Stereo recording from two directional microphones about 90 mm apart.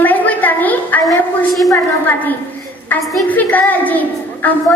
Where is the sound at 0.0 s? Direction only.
20° left (ahead or behind).